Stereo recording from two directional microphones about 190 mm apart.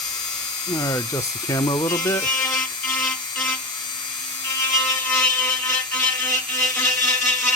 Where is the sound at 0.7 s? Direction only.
20° left (ahead or behind).